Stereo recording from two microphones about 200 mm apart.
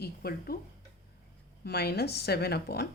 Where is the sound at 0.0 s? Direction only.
50° left (ahead or behind).